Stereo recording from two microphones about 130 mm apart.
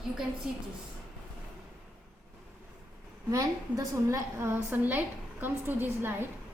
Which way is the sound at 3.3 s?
25° right (ahead or behind).